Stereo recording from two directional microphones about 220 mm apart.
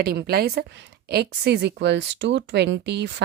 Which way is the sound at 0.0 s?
45° right (ahead or behind).